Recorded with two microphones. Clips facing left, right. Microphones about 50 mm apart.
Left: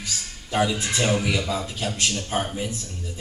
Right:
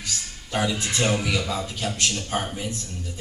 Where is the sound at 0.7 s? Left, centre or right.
Left.